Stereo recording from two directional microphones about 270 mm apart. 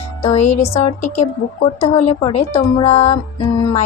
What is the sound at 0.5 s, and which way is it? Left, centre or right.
Speech, left.